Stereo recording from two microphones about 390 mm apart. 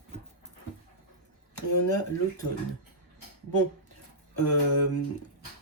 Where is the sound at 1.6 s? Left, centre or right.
Left.